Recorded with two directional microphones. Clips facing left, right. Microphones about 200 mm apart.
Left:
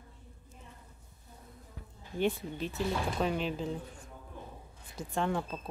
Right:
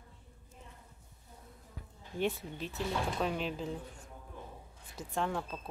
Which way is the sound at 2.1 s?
Centre (ahead or behind).